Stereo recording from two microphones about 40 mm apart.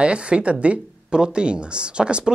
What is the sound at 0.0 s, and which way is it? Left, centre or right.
Speech, right.